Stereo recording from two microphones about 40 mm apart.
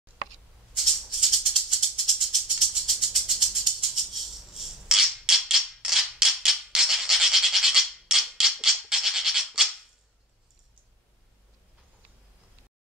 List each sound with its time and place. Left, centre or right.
0.7 s maraca: centre
1.3 s music: centre
6.1 s toothbrush: centre
8.9 s music: centre
9.5 s music: centre